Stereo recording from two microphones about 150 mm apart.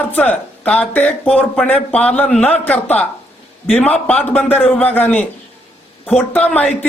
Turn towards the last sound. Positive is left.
turn(degrees=10)  # may be behind; listen again after turning